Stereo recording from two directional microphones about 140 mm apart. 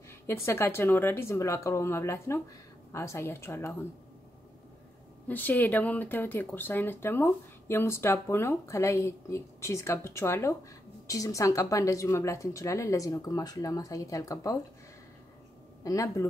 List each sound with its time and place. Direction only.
0.3 s speech: 20° left (ahead or behind)
5.3 s speech: 15° left (ahead or behind)
15.8 s speech: 25° left (ahead or behind)